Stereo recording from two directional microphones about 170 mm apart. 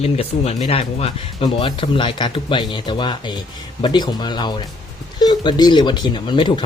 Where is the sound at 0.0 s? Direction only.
35° left (ahead or behind).